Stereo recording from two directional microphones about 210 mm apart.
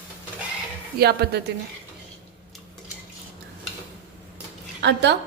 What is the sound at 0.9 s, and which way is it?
Speech, 50° right (ahead or behind).